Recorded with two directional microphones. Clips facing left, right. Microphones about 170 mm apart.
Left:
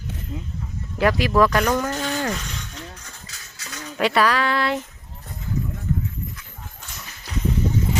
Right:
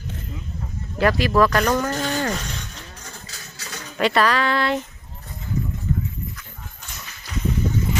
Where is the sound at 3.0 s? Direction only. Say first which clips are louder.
Right 4 dB; 35° right (ahead or behind).